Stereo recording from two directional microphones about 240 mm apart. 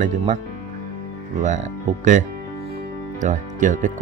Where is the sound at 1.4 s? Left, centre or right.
Right.